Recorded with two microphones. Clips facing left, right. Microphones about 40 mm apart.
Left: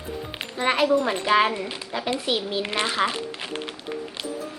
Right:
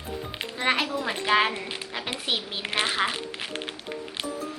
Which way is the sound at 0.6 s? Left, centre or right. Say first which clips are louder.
Left 5 dB; centre.